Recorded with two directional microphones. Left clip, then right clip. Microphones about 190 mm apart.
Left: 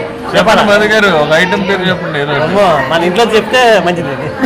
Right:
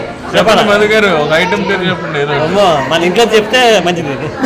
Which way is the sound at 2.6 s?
10° right (ahead or behind).